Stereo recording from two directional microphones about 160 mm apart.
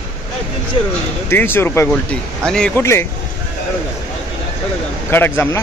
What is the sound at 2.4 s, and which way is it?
Speech, 5° left (ahead or behind).